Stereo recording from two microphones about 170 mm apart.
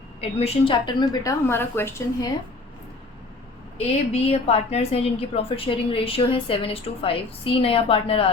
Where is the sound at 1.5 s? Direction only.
15° left (ahead or behind).